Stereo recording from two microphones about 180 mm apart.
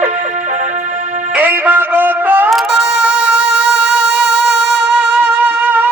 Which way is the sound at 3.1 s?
75° right (ahead or behind).